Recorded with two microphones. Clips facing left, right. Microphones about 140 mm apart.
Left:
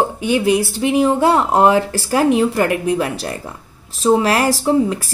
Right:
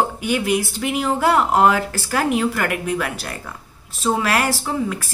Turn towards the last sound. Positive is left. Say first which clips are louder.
# left 8 dB
turn(degrees=35)  # may be behind; listen again after turning